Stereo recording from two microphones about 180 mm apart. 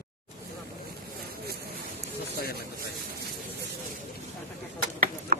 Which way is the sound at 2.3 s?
60° left (ahead or behind).